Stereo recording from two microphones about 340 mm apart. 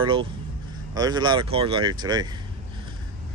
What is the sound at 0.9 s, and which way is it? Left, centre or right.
Speech, centre.